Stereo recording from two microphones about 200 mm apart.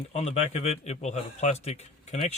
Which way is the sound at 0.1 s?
35° left (ahead or behind).